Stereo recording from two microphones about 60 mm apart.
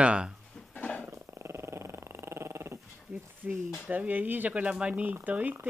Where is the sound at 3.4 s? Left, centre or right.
Centre.